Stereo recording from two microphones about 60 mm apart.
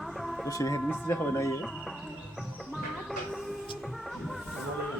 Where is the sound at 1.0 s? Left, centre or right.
Left.